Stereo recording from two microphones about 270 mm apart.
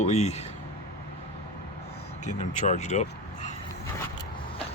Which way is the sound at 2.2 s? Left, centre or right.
Left.